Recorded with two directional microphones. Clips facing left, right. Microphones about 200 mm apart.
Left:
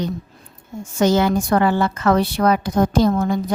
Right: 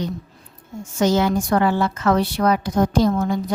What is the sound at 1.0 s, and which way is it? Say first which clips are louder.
A woman's voice: left 2 dB; 60° left (ahead or behind).